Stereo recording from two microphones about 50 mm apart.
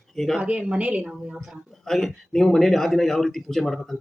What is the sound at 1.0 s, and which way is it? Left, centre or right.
Speech, centre.